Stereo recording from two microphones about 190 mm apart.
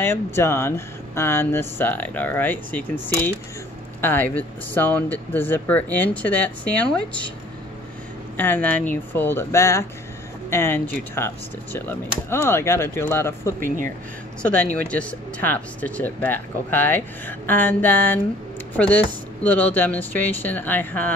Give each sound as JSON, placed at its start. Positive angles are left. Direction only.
{"t": 0.0, "sound": "speech", "side_deg": 10}
{"t": 8.4, "sound": "speech", "side_deg": 10}
{"t": 13.6, "sound": "speech", "side_deg": -45}
{"t": 14.4, "sound": "speech", "side_deg": 5}